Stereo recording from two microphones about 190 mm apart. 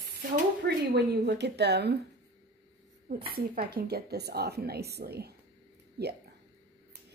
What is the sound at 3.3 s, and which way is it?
A woman's voice, 55° right (ahead or behind).